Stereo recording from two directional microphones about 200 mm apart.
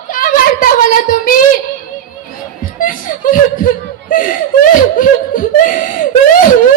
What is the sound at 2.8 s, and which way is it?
Child singing, 45° left (ahead or behind).